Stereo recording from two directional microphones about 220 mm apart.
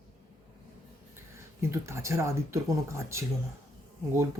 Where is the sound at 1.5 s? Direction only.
10° right (ahead or behind).